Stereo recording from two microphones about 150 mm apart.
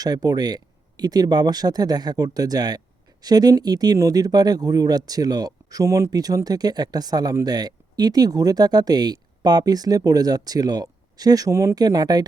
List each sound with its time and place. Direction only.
0.0 s speech: 25° right (ahead or behind)